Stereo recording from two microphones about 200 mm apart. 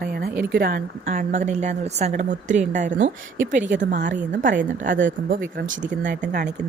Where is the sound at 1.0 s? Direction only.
35° right (ahead or behind).